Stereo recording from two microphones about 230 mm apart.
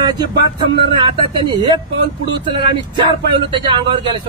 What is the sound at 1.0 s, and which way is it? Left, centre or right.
Speech, right.